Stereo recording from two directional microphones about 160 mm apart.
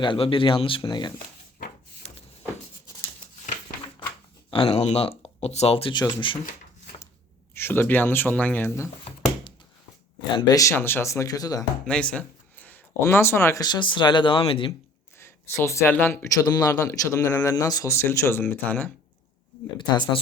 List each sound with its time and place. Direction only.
0.0 s speech: 30° left (ahead or behind)
2.0 s vehicle: 45° left (ahead or behind)
4.5 s speech: 35° left (ahead or behind)
7.5 s speech: 15° left (ahead or behind)
10.3 s speech: 20° left (ahead or behind)
11.9 s speech: 5° left (ahead or behind); by 14.7 s 35° left (ahead or behind)
15.2 s speech: 15° left (ahead or behind)
19.9 s speech: 25° left (ahead or behind)